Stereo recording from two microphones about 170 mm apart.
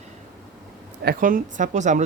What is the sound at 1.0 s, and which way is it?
Speech, 60° right (ahead or behind).